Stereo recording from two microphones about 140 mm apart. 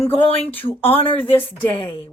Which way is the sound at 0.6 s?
40° left (ahead or behind).